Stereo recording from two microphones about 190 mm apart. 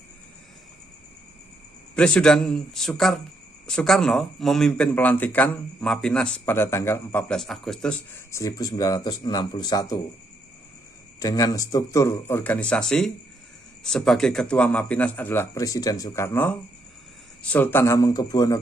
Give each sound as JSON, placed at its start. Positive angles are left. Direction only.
{"t": 2.0, "sound": "speech", "side_deg": 5}
{"t": 8.3, "sound": "speech", "side_deg": 15}
{"t": 11.1, "sound": "speech", "side_deg": 20}